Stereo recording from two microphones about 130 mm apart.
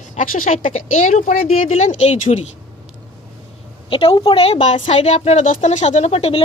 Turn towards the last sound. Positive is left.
turn(degrees=50)  # may be behind; listen again after turning